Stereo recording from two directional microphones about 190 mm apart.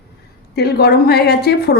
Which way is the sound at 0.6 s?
55° left (ahead or behind).